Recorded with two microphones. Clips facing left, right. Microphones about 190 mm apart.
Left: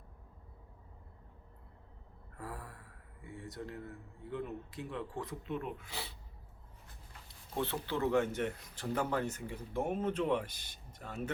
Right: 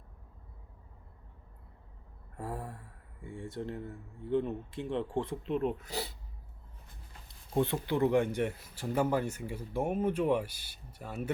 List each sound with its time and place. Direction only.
2.4 s speech: 30° right (ahead or behind)
7.5 s speech: 15° right (ahead or behind)